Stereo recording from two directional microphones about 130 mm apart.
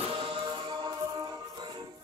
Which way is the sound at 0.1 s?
40° right (ahead or behind).